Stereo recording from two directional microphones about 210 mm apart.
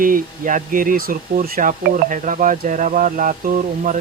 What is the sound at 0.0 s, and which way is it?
Speech, 40° right (ahead or behind).